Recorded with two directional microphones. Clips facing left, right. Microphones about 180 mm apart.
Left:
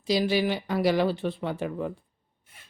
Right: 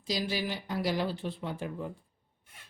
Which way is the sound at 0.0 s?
70° left (ahead or behind).